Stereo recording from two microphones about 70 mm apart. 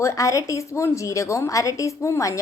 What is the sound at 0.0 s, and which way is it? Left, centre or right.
A woman's voice, left.